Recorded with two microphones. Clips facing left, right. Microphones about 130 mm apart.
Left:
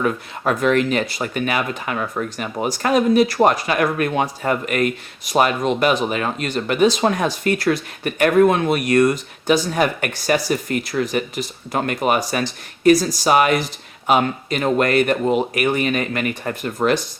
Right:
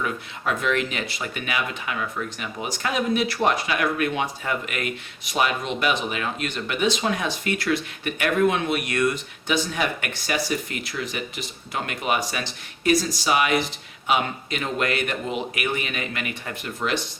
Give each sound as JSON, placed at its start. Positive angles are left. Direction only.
{"t": 0.0, "sound": "speech", "side_deg": 45}